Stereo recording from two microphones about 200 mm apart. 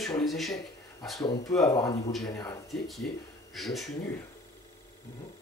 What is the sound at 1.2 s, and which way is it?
Speech, 15° left (ahead or behind).